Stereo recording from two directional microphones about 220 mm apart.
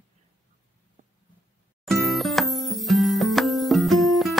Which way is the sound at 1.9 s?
Centre (ahead or behind).